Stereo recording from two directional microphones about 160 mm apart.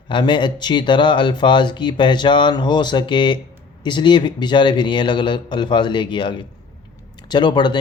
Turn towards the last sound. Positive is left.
turn(degrees=30)  # may be behind; listen again after turning